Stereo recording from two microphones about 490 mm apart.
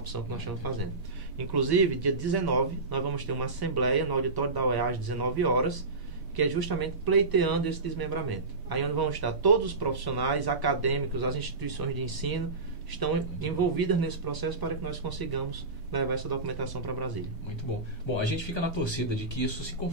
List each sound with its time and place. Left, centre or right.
0.6 s speech: right
18.1 s speech: left